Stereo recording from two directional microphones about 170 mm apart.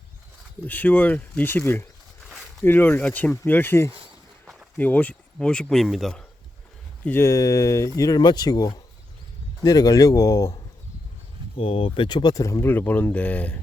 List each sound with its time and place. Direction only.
0.7 s speech: 10° left (ahead or behind)
2.3 s a sound: 5° right (ahead or behind)
2.6 s speech: 10° left (ahead or behind)
7.0 s speech: 15° left (ahead or behind)
11.5 s speech: 30° left (ahead or behind); by 13.6 s 10° left (ahead or behind)